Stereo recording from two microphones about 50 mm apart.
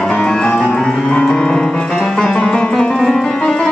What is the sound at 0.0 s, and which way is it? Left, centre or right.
Music, centre.